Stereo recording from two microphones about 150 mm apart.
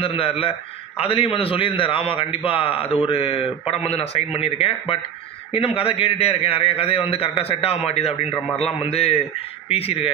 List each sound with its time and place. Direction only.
0.0 s a man's voice: 40° left (ahead or behind)